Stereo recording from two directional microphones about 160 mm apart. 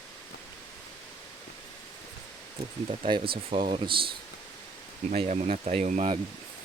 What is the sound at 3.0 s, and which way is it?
Speech, 35° right (ahead or behind).